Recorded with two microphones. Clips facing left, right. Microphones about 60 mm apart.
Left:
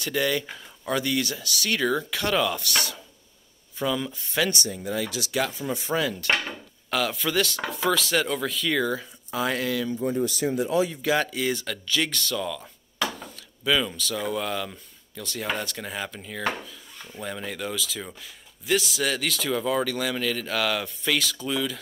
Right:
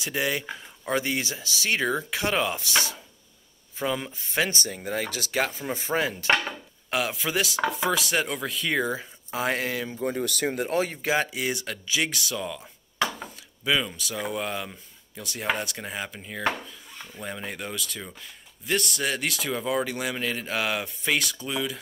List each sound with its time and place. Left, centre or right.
0.0 s speech: centre
4.6 s speech: right
6.9 s chopping: centre
8.7 s speech: right
9.5 s speech: right
10.0 s speech: right
11.1 s chopping: centre
12.4 s a sound: centre
13.2 s chop: centre
14.2 s speech: centre
15.5 s chopping: centre
17.1 s speech: centre
20.2 s chopping: centre
21.4 s speech: centre